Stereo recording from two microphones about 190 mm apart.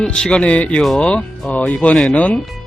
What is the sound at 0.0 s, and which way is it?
Speech, 5° left (ahead or behind).